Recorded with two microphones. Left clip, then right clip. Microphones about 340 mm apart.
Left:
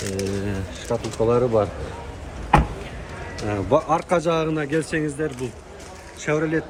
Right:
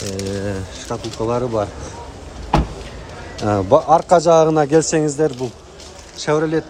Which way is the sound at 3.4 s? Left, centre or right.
Centre.